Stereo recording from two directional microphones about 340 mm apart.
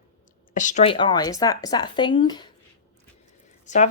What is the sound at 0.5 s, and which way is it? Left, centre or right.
A woman's voice, left.